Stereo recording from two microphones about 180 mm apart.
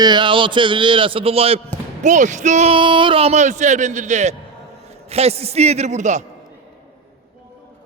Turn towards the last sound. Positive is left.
turn(degrees=-40)  # may be behind; listen again after turning